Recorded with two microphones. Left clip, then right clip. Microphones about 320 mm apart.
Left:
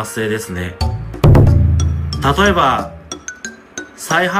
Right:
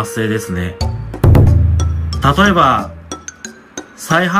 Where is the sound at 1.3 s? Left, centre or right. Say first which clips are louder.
Left 1 dB; centre.